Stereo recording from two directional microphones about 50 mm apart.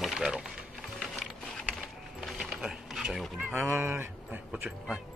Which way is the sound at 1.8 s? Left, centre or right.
Centre.